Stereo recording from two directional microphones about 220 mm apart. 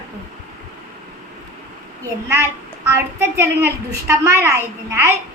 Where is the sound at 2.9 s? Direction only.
10° right (ahead or behind).